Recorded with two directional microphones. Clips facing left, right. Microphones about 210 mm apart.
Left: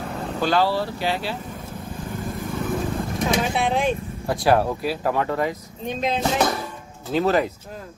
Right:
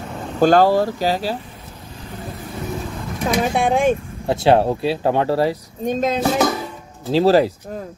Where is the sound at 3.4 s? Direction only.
50° right (ahead or behind).